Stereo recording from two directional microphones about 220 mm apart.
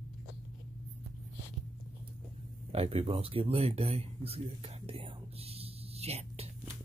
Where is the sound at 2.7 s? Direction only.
25° right (ahead or behind).